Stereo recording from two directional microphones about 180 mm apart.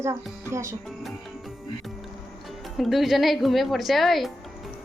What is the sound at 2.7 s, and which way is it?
A woman's voice, centre (ahead or behind).